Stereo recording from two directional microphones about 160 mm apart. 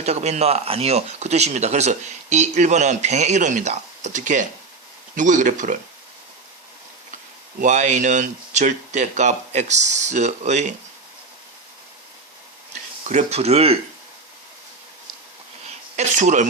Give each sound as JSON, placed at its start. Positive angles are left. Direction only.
{"t": 0.0, "sound": "speech", "side_deg": -45}
{"t": 7.6, "sound": "speech", "side_deg": -50}
{"t": 13.1, "sound": "speech", "side_deg": -45}
{"t": 16.0, "sound": "speech", "side_deg": -50}